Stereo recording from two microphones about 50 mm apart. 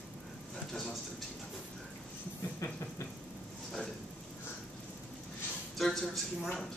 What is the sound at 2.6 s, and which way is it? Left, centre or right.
Vehicle, left.